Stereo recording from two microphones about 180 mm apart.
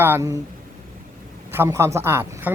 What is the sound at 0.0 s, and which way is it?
Speech, 10° right (ahead or behind).